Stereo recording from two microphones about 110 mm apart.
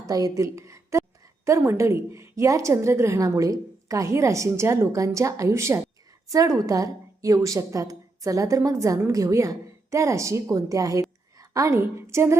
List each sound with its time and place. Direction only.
0.1 s a woman's voice: 30° right (ahead or behind)